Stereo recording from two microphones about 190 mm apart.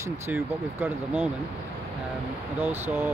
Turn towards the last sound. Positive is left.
turn(degrees=-10)  # may be behind; listen again after turning